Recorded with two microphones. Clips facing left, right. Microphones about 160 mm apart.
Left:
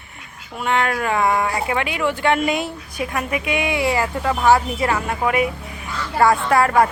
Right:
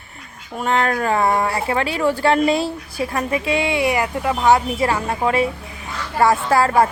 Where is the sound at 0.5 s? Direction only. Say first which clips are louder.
Right 1 dB; 40° right (ahead or behind).